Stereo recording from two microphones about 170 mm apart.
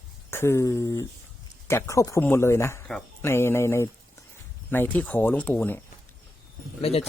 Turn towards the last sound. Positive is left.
turn(degrees=35)  # may be behind; listen again after turning